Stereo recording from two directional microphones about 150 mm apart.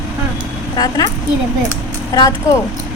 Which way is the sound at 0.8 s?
25° left (ahead or behind).